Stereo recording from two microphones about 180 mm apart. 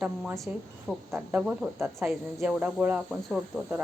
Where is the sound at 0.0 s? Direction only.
Centre (ahead or behind).